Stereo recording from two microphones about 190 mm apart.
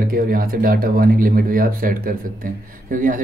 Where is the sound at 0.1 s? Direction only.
50° right (ahead or behind).